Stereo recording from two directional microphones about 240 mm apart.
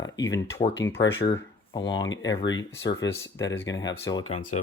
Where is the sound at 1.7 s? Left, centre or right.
Centre.